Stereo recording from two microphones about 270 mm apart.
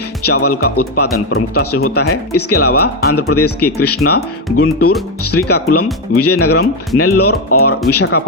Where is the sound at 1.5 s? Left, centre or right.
Left.